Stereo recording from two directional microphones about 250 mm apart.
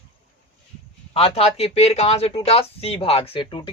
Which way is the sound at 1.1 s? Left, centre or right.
Left.